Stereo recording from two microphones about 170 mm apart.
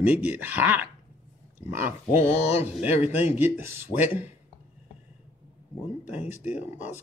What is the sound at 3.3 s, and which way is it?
Speech, 10° right (ahead or behind).